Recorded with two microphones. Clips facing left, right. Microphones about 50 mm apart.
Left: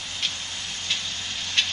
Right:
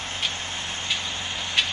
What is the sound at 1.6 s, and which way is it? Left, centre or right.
Vehicle, centre.